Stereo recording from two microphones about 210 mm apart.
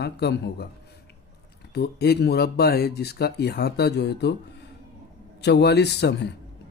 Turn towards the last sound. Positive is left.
turn(degrees=55)  # may be behind; listen again after turning